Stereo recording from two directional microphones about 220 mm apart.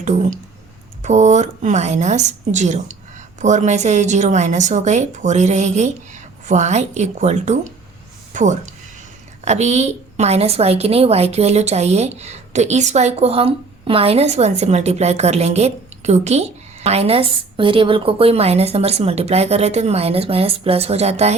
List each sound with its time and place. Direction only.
0.0 s a woman's voice: 35° right (ahead or behind)